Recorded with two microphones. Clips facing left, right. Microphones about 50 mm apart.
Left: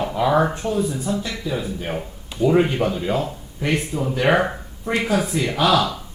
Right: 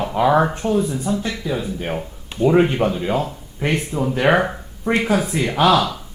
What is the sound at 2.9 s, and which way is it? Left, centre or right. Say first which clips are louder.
Speech: right 1 dB; centre.